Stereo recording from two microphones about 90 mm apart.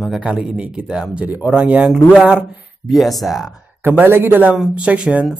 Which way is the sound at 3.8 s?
25° right (ahead or behind).